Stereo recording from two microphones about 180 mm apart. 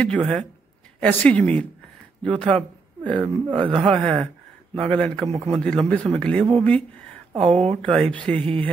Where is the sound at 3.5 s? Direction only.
25° right (ahead or behind).